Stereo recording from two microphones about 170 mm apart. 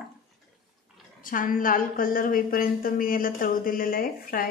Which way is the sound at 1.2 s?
55° left (ahead or behind).